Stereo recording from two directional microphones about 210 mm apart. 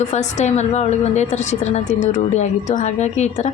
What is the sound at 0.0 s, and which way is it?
A woman's voice, 35° left (ahead or behind).